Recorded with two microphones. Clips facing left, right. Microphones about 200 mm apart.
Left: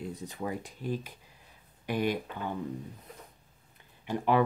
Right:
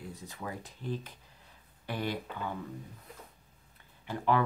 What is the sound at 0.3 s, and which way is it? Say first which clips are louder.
Speech: left 4 dB; 15° left (ahead or behind).